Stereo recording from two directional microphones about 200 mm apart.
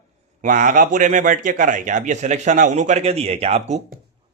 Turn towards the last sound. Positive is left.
turn(degrees=-30)  # may be behind; listen again after turning